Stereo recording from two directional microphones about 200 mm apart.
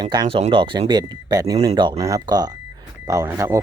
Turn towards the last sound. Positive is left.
turn(degrees=-15)  # may be behind; listen again after turning